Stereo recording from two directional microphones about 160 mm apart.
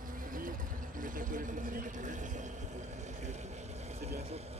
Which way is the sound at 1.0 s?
55° right (ahead or behind).